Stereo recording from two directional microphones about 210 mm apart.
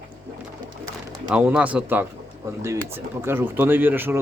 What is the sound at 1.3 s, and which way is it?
Speech, 5° right (ahead or behind).